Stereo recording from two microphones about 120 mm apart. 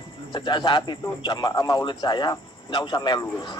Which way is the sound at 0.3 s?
40° left (ahead or behind).